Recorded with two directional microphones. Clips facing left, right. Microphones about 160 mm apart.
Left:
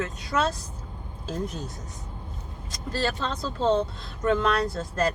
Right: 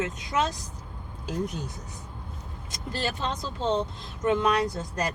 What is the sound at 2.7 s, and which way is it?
A woman's voice, 20° right (ahead or behind).